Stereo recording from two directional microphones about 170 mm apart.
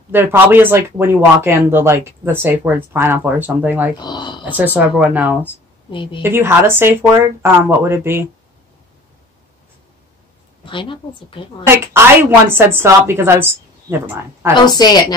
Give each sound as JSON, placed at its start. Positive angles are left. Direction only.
{"t": 0.1, "sound": "a woman's voice", "side_deg": -10}
{"t": 3.9, "sound": "a woman's voice", "side_deg": 25}
{"t": 4.5, "sound": "a woman's voice", "side_deg": -10}
{"t": 5.9, "sound": "a woman's voice", "side_deg": 30}
{"t": 6.2, "sound": "a woman's voice", "side_deg": -15}
{"t": 10.6, "sound": "a woman's voice", "side_deg": 30}
{"t": 11.6, "sound": "a woman's voice", "side_deg": -15}
{"t": 14.8, "sound": "a woman's voice", "side_deg": 25}